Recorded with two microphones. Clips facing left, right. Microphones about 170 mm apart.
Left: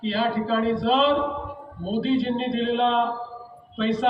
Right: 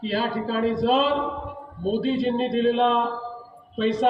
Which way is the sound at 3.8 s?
45° right (ahead or behind).